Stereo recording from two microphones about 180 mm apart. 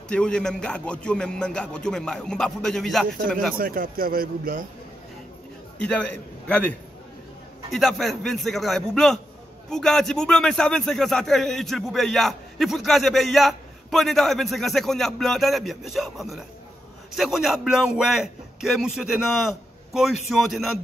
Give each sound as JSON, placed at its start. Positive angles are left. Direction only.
{"t": 0.1, "sound": "a man's voice", "side_deg": 5}
{"t": 3.5, "sound": "a man's voice", "side_deg": -55}
{"t": 5.8, "sound": "a man's voice", "side_deg": 5}
{"t": 7.7, "sound": "a man's voice", "side_deg": 0}